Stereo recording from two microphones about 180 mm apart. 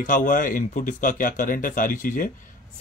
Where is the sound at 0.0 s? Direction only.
45° left (ahead or behind).